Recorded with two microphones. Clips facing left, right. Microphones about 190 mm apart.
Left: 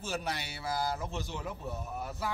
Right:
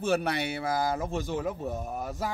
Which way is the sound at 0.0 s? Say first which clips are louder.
Right 9 dB; 60° right (ahead or behind).